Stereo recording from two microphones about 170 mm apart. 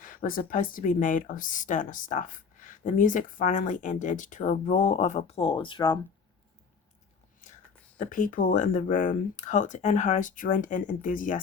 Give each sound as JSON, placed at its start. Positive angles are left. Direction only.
{"t": 0.0, "sound": "speech", "side_deg": 55}
{"t": 7.9, "sound": "speech", "side_deg": 50}